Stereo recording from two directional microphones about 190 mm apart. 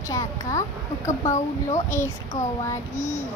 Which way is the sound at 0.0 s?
15° left (ahead or behind).